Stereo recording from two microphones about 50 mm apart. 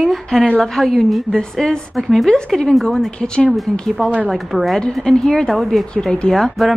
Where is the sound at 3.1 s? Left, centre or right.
Centre.